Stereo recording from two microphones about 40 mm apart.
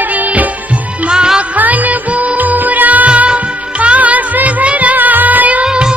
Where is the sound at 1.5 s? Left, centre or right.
Right.